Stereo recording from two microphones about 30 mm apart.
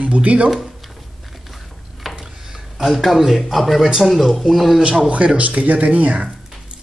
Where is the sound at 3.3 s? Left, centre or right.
Centre.